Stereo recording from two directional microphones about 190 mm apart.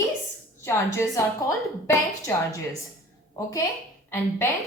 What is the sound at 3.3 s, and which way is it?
Speech, 15° left (ahead or behind).